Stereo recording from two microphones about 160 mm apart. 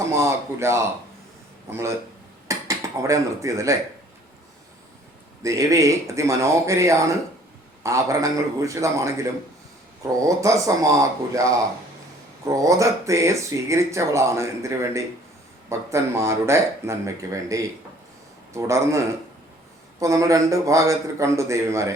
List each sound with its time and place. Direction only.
0.0 s speech: 15° right (ahead or behind)
5.4 s speech: 20° right (ahead or behind)